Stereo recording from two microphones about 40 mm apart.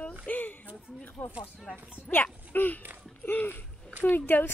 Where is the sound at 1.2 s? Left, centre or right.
Left.